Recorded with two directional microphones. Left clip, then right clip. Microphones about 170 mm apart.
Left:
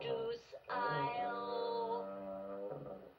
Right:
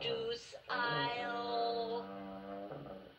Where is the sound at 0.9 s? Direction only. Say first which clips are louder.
Right 1 dB; 20° left (ahead or behind).